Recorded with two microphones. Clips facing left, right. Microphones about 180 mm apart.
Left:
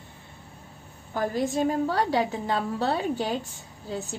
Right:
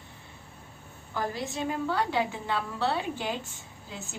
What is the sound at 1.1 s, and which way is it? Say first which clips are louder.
A woman's voice: left 7 dB; 50° left (ahead or behind).